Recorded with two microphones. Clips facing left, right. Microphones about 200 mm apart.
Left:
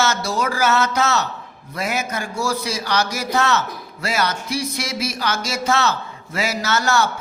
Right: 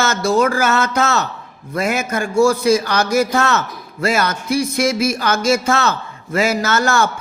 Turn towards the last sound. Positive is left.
turn(degrees=-50)  # may be behind; listen again after turning